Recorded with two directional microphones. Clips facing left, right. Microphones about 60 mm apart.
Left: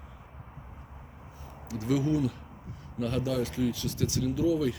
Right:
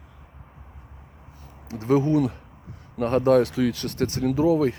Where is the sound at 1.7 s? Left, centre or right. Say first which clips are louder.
Right 7 dB; right.